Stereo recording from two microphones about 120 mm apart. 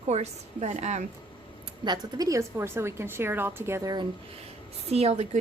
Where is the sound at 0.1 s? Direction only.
65° right (ahead or behind).